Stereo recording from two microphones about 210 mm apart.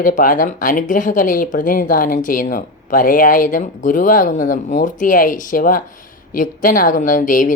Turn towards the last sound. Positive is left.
turn(degrees=40)  # may be behind; listen again after turning